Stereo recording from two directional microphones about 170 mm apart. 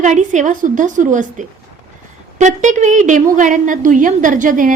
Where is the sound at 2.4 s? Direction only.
45° right (ahead or behind).